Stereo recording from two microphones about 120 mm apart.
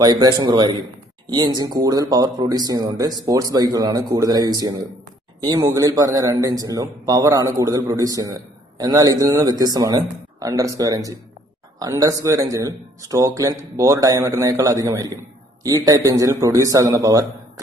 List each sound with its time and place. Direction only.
0.0 s a man's voice: 35° right (ahead or behind)